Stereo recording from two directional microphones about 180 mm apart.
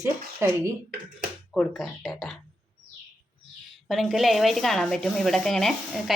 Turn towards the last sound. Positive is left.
turn(degrees=0)  # may be behind; listen again after turning